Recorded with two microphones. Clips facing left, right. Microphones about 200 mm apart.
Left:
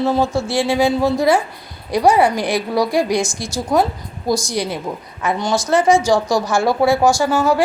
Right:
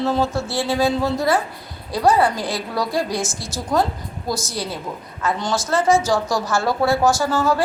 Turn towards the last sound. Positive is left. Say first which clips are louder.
# left 3 dB
turn(degrees=15)  # may be behind; listen again after turning